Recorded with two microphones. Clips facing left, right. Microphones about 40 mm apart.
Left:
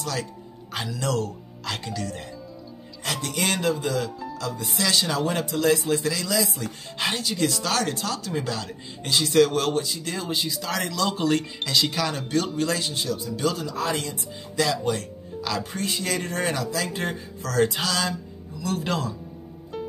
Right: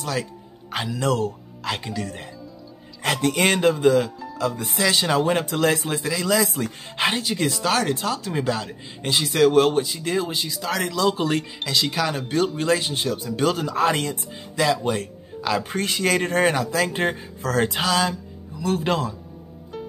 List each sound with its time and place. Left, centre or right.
0.0 s speech: centre
3.0 s speech: right
5.5 s speech: right
5.9 s speech: centre
6.2 s speech: right
6.6 s speech: right
10.3 s speech: centre
12.5 s speech: right
14.5 s speech: right
16.0 s speech: right